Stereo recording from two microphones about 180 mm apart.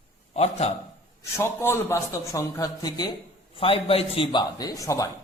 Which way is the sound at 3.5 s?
30° left (ahead or behind).